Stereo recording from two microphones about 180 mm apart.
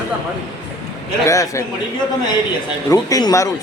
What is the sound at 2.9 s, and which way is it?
Speech, 20° left (ahead or behind).